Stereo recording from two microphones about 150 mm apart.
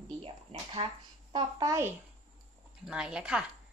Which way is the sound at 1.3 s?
20° right (ahead or behind).